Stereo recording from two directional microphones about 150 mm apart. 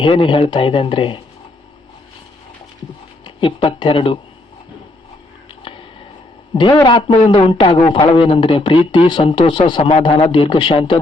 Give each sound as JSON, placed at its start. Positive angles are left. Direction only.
{"t": 0.0, "sound": "a man's voice", "side_deg": 35}
{"t": 3.2, "sound": "speech", "side_deg": 35}
{"t": 6.5, "sound": "a man's voice", "side_deg": 35}